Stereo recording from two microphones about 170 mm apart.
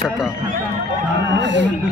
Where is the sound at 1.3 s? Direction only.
90° right.